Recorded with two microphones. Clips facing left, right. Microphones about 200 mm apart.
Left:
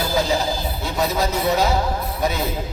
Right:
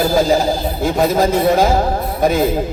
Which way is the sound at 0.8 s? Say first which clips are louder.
Right 8 dB; 50° right (ahead or behind).